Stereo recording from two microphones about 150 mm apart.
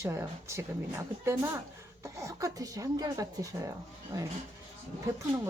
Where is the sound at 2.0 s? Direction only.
20° right (ahead or behind).